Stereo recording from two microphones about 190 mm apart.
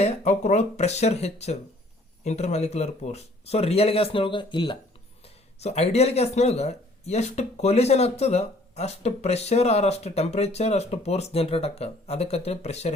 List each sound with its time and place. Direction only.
0.0 s speech: 35° left (ahead or behind)